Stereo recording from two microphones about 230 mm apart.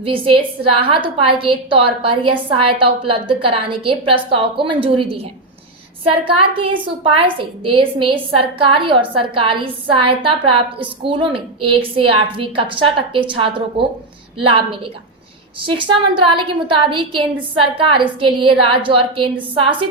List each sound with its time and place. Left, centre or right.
0.0 s a woman's voice: right
6.1 s a woman's voice: right